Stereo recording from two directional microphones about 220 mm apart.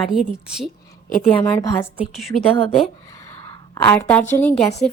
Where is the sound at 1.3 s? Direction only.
10° left (ahead or behind).